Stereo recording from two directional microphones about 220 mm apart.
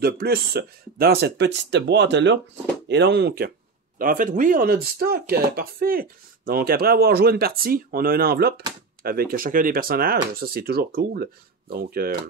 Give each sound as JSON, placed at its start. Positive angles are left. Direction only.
{"t": 0.0, "sound": "speech", "side_deg": -45}